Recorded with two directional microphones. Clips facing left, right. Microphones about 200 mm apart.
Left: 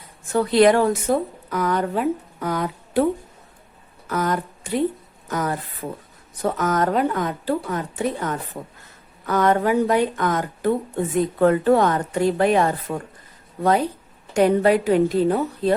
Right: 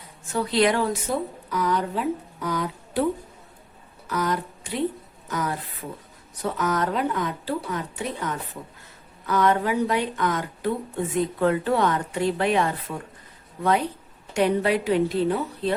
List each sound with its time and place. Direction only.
0.3 s a woman's voice: 50° left (ahead or behind)
4.0 s a woman's voice: 50° left (ahead or behind)